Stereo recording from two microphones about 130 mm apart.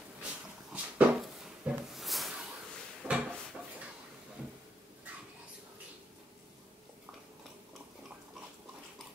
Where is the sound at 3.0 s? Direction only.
15° right (ahead or behind).